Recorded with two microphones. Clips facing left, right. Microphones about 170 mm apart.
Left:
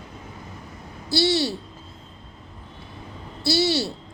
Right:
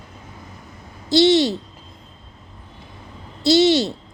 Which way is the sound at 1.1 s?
20° right (ahead or behind).